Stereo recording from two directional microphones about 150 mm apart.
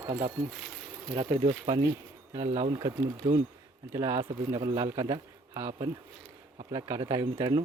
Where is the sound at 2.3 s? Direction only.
25° right (ahead or behind).